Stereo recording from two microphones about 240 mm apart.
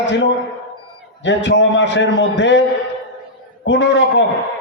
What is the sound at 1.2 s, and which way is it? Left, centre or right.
A man's voice, left.